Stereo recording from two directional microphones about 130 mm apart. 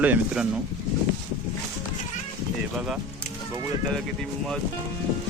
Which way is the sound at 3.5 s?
20° right (ahead or behind).